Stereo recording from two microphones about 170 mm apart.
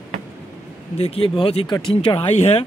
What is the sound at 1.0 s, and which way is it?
Speech, 35° left (ahead or behind).